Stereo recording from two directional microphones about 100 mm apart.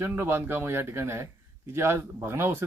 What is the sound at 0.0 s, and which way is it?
Speech, 20° right (ahead or behind).